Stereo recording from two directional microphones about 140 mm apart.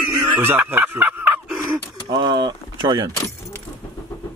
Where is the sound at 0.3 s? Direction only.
15° right (ahead or behind).